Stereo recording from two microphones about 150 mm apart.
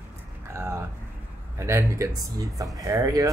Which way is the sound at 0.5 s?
15° right (ahead or behind).